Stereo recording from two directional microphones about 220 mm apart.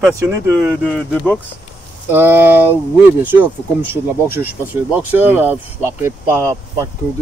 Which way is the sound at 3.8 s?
10° right (ahead or behind).